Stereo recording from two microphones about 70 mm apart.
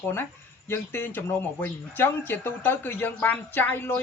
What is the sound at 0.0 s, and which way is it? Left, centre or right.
Speech, left.